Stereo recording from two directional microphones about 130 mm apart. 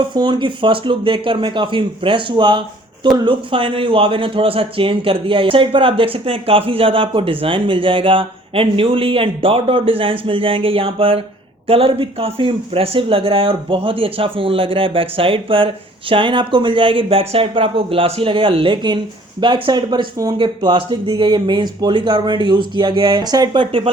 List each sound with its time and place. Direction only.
0.1 s a man's voice: 35° right (ahead or behind)